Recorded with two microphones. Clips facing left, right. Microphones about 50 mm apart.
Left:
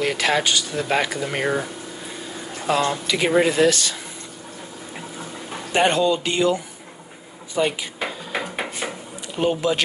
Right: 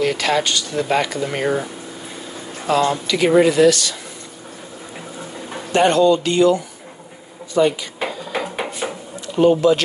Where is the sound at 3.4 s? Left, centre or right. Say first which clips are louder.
Right 4 dB; left.